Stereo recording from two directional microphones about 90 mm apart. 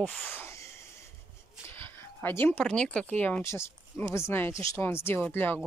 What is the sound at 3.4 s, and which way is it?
Speech, 30° left (ahead or behind).